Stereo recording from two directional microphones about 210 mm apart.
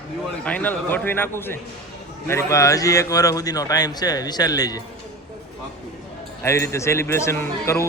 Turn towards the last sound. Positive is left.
turn(degrees=10)  # may be behind; listen again after turning